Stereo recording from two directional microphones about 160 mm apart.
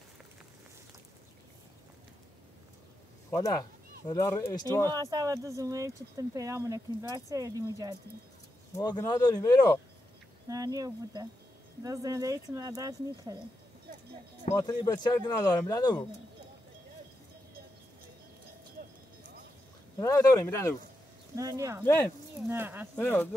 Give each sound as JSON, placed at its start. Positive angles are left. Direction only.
{"t": 3.3, "sound": "speech", "side_deg": 20}
{"t": 4.8, "sound": "speech", "side_deg": -25}
{"t": 8.7, "sound": "speech", "side_deg": 20}
{"t": 10.5, "sound": "speech", "side_deg": -20}
{"t": 14.5, "sound": "speech", "side_deg": 20}
{"t": 20.0, "sound": "speech", "side_deg": 20}
{"t": 21.4, "sound": "speech", "side_deg": -20}
{"t": 21.8, "sound": "speech", "side_deg": 15}
{"t": 22.5, "sound": "speech", "side_deg": -15}
{"t": 22.9, "sound": "speech", "side_deg": 10}